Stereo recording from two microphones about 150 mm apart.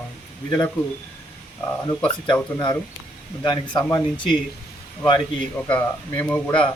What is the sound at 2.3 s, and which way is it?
Speech, 25° left (ahead or behind).